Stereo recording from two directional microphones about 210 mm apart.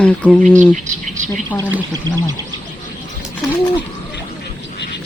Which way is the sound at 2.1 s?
20° right (ahead or behind).